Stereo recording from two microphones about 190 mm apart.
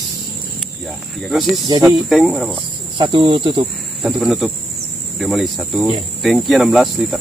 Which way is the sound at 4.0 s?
Centre (ahead or behind).